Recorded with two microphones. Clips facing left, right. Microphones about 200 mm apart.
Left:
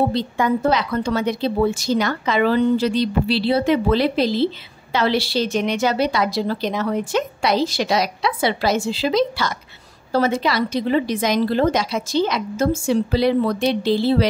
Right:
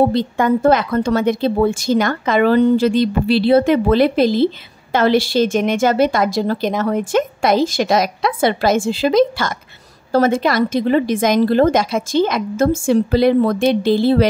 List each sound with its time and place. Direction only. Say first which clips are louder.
0.1 s a woman's voice: right 4 dB; 50° right (ahead or behind)